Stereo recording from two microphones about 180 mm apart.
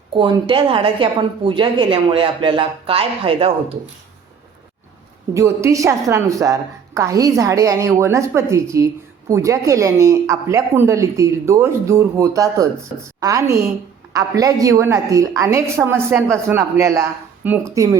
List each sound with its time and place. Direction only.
0.2 s a woman's voice: 30° right (ahead or behind)
5.6 s a woman's voice: 15° right (ahead or behind)